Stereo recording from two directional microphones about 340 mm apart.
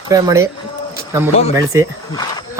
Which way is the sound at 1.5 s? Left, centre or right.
Centre.